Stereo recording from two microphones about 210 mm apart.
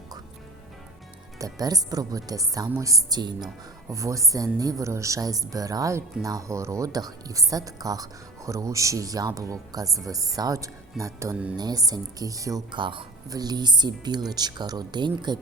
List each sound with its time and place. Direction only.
1.4 s speech: 15° right (ahead or behind)